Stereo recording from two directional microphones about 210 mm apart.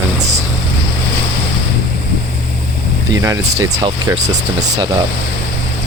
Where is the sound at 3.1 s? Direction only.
15° right (ahead or behind).